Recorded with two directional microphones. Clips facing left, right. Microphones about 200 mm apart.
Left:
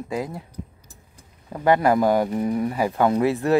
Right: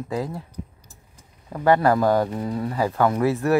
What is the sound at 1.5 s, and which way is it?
Speech, 15° left (ahead or behind).